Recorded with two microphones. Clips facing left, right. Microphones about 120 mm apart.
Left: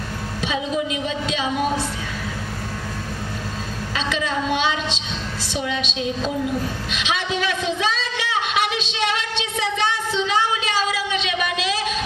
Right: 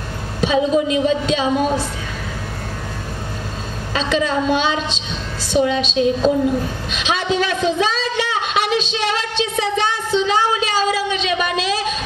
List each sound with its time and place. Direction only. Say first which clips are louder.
0.4 s a woman's voice: right 8 dB; 35° right (ahead or behind)
3.9 s a woman's voice: right 6 dB; 35° right (ahead or behind)
6.9 s a sound: right 6 dB; 35° right (ahead or behind)